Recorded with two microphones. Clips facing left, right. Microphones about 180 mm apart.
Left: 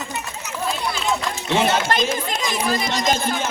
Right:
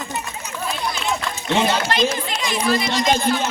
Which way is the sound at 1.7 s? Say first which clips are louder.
Even; 50° left (ahead or behind).